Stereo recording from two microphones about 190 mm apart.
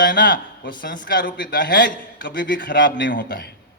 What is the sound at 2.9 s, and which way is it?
Speech, 70° left (ahead or behind).